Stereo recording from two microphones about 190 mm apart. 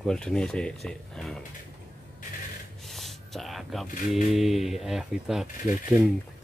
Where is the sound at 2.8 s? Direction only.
Centre (ahead or behind).